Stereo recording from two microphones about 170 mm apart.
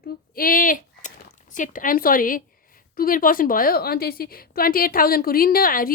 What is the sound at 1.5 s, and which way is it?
A woman's voice, 50° left (ahead or behind).